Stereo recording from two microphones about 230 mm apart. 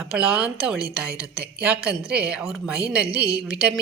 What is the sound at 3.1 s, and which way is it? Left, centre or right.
Speech, right.